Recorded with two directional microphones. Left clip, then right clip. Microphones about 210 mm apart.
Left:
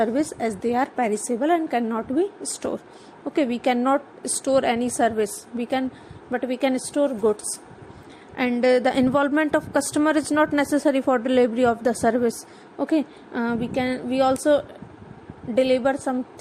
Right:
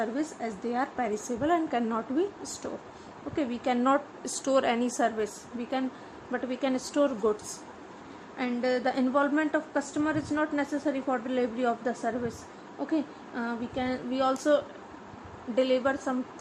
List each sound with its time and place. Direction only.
0.0 s a woman's voice: 30° left (ahead or behind)
8.4 s a woman's voice: 30° left (ahead or behind)